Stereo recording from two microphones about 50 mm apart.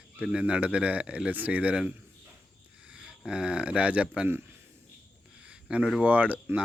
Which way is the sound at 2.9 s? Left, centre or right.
Centre.